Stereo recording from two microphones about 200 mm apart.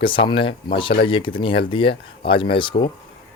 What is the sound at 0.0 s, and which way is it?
Speech, 25° left (ahead or behind).